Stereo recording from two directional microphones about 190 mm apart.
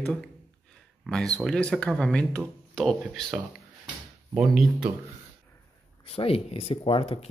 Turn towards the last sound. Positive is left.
turn(degrees=30)  # may be behind; listen again after turning